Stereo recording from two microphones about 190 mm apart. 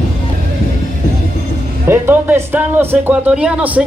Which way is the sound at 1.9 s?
10° right (ahead or behind).